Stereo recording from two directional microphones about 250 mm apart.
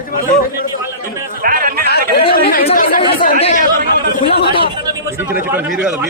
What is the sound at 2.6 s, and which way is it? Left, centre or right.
Chatter, left.